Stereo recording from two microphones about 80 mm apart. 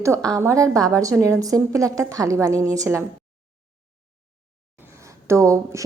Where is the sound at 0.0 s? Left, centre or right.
Right.